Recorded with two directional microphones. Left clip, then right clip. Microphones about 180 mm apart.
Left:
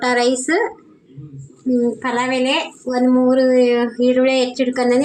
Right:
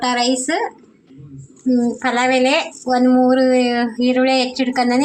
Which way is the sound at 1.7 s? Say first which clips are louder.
Even; 20° right (ahead or behind).